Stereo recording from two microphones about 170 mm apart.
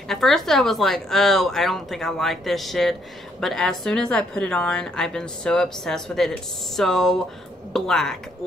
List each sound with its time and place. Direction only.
0.1 s a woman's voice: centre (ahead or behind)